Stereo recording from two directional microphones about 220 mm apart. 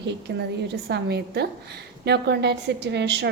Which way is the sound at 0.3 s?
45° right (ahead or behind).